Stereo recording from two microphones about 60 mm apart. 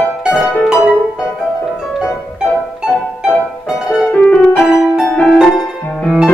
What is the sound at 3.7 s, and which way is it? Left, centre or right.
Music, centre.